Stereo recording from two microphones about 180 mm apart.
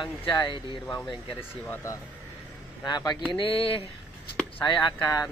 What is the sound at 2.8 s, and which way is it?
Speech, 25° left (ahead or behind).